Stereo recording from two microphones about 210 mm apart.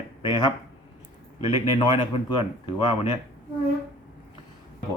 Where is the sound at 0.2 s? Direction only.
20° left (ahead or behind).